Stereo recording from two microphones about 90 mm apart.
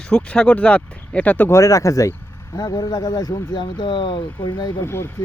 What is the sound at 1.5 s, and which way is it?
Speech, 40° left (ahead or behind).